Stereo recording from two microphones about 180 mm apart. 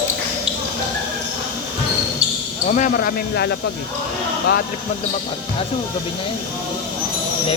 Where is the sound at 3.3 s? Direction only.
65° left (ahead or behind).